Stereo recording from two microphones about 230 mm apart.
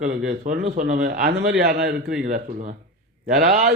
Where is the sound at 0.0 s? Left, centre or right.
Right.